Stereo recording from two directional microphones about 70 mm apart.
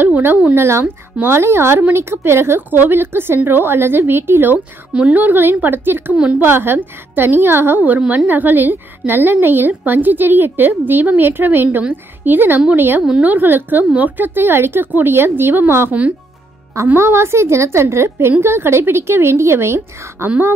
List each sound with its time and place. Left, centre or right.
0.0 s a woman's voice: right
0.6 s speech: right
4.9 s a woman's voice: right